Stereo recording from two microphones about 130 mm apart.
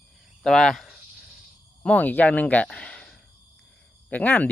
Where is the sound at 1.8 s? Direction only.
10° left (ahead or behind).